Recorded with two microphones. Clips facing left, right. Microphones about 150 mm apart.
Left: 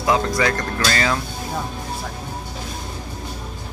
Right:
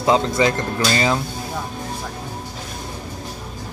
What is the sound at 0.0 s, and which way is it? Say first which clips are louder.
Speech: right 2 dB; 25° right (ahead or behind).